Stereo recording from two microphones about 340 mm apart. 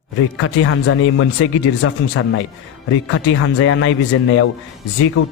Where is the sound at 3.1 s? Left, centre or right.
Left.